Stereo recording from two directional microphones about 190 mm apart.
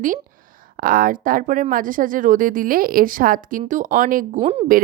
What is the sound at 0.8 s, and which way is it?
Speech, 50° right (ahead or behind).